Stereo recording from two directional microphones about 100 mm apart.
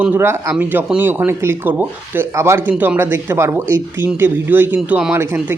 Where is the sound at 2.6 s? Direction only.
15° right (ahead or behind).